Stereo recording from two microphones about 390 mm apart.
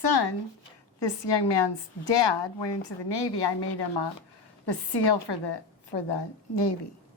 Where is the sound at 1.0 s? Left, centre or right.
Left.